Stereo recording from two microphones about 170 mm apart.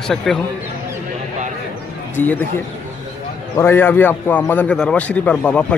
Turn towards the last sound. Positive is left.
turn(degrees=5)  # may be behind; listen again after turning